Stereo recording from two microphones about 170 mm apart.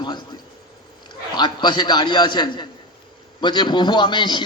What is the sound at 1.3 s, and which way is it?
A man's voice, 25° left (ahead or behind).